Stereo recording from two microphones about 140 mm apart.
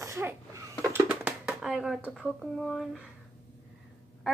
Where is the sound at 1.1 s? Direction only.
5° right (ahead or behind).